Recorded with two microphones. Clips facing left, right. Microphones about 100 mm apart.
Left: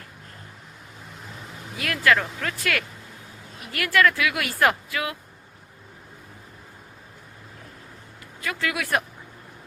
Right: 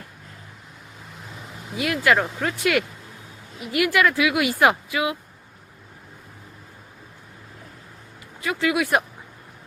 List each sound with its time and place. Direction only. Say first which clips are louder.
1.8 s speech: right 2 dB; 20° right (ahead or behind)
8.4 s speech: right 6 dB; 15° right (ahead or behind)